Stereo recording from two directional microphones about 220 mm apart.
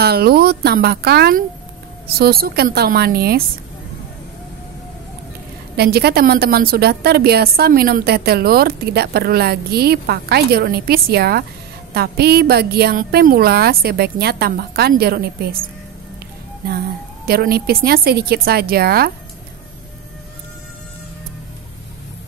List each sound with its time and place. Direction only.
0.0 s a woman's voice: 45° right (ahead or behind)
5.8 s a woman's voice: 45° right (ahead or behind)
17.3 s a woman's voice: 45° right (ahead or behind)